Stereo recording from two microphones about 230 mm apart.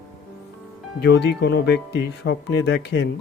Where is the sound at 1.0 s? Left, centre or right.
Left.